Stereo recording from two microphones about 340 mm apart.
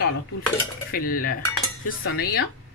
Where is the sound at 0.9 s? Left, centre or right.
Left.